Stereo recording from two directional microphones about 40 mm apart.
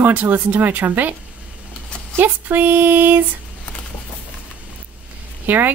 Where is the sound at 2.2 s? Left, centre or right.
Right.